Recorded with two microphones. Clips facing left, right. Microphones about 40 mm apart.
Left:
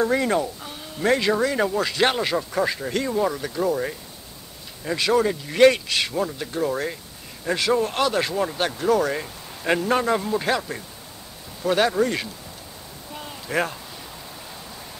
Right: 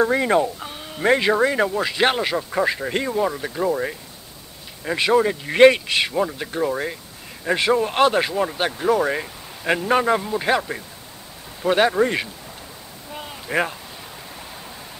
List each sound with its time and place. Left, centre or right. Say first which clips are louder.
0.1 s speech: right 3 dB; centre
5.4 s speech: right 4 dB; right
6.7 s speech: right 1 dB; centre
7.4 s speech: right 2 dB; right
8.3 s speech: right 2 dB; centre
10.2 s speech: even; centre
10.5 s speech: right 3 dB; centre
13.1 s a sound: right 2 dB; centre